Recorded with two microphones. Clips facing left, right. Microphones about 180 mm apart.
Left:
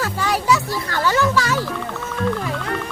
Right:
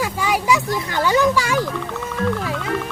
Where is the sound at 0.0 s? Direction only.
10° right (ahead or behind).